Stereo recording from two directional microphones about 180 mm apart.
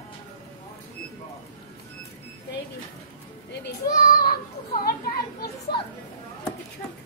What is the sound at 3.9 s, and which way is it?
Speech, 55° left (ahead or behind).